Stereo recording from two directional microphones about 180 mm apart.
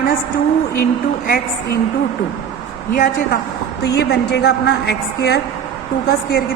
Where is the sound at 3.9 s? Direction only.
65° left (ahead or behind).